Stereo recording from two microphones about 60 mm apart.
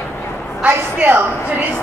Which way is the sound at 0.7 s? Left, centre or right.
Right.